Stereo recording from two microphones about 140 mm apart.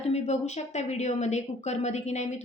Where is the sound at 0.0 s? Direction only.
50° left (ahead or behind).